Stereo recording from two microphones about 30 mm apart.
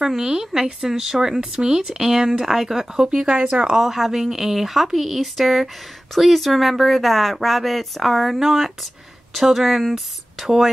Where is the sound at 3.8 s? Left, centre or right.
Centre.